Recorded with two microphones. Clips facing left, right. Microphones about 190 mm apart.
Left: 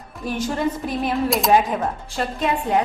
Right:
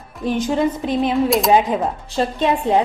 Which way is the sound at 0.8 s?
20° right (ahead or behind).